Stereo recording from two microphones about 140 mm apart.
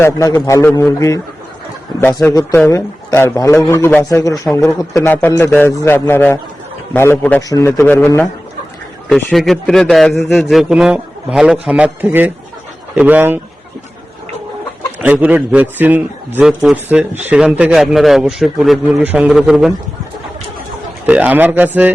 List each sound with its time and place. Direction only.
0.0 s a man's voice: 25° left (ahead or behind)
2.2 s a man's voice: 20° left (ahead or behind)
9.0 s a man's voice: centre (ahead or behind)
15.0 s a man's voice: 10° right (ahead or behind)
21.1 s a man's voice: 10° right (ahead or behind)